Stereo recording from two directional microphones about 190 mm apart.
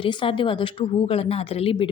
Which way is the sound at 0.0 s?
25° left (ahead or behind).